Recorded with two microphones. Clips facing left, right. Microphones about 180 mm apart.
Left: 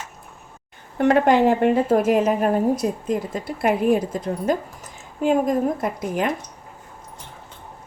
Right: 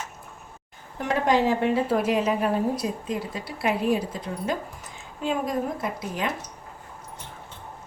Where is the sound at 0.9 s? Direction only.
65° left (ahead or behind).